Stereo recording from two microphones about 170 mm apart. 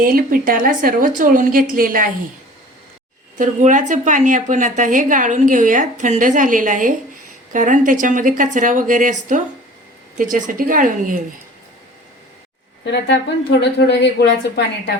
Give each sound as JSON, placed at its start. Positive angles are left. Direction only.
{"t": 0.0, "sound": "a woman's voice", "side_deg": -55}
{"t": 3.3, "sound": "a woman's voice", "side_deg": -50}
{"t": 12.8, "sound": "a woman's voice", "side_deg": 90}